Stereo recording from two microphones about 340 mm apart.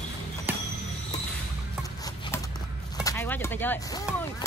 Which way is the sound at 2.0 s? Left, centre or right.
Centre.